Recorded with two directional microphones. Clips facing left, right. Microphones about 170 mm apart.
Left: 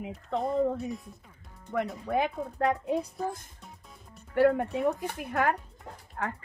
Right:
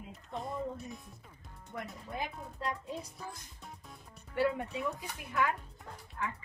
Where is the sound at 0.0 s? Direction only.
75° left (ahead or behind).